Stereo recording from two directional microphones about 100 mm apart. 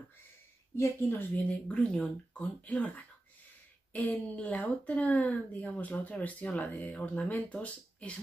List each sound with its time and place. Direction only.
0.7 s speech: 20° left (ahead or behind)
1.7 s speech: 10° left (ahead or behind)
3.9 s speech: 15° left (ahead or behind)